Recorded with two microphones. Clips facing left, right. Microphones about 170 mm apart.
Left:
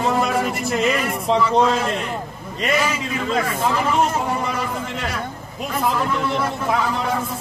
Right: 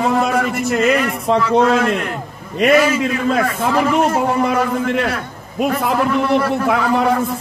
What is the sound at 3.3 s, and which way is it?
A man's voice, 60° right (ahead or behind).